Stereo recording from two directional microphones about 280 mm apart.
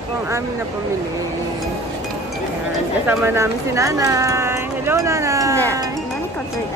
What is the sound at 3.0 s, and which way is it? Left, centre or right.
Speech, centre.